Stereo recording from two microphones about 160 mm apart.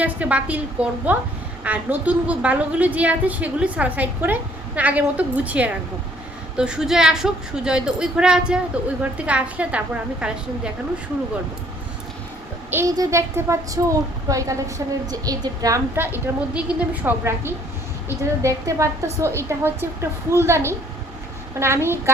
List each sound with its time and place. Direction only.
0.0 s a woman's voice: 10° right (ahead or behind)
12.7 s a woman's voice: 20° right (ahead or behind)